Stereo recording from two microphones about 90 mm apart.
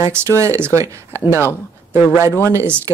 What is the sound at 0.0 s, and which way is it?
Speech, 30° right (ahead or behind).